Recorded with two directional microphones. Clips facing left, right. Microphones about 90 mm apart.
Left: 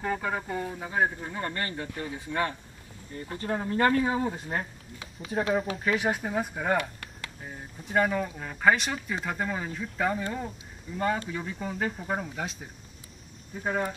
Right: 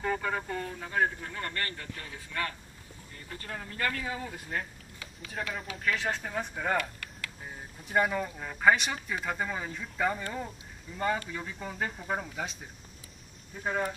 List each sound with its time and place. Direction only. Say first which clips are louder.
0.0 s speech: left 1 dB; 5° left (ahead or behind); by 5.9 s 30° left (ahead or behind)
5.9 s speech: left 5 dB; 15° left (ahead or behind)
6.8 s a sound: left 2 dB; 25° left (ahead or behind)
7.4 s speech: left 3 dB; centre (ahead or behind)
13.6 s speech: left 2 dB; 5° left (ahead or behind)